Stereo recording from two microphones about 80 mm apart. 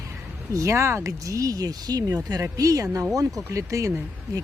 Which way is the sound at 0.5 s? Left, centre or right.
Right.